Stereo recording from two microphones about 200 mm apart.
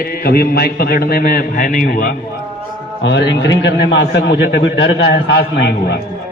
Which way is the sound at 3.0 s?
60° left (ahead or behind).